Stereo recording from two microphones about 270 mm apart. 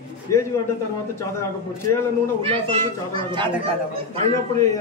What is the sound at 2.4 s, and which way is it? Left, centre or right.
A child's voice, centre.